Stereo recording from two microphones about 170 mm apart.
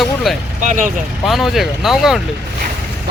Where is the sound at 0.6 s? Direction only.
50° right (ahead or behind).